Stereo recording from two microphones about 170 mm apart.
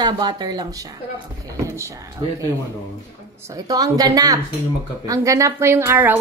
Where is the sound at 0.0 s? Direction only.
25° right (ahead or behind).